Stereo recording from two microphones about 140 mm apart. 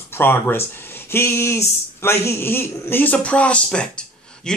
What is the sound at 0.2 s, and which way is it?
Speech, 15° left (ahead or behind).